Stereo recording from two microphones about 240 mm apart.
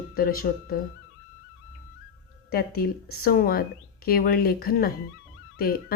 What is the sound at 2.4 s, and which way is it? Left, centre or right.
A woman's voice, left.